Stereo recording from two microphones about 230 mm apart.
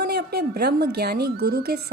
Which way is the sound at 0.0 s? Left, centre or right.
Right.